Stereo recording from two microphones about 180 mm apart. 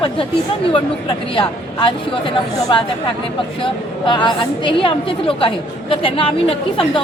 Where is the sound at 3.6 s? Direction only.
25° left (ahead or behind).